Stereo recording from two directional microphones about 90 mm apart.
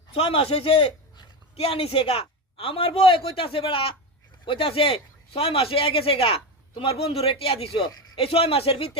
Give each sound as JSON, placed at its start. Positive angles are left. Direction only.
{"t": 0.1, "sound": "a man's voice", "side_deg": 90}
{"t": 4.4, "sound": "speech", "side_deg": 80}